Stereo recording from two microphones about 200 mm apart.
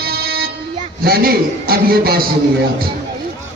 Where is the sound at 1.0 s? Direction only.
50° right (ahead or behind).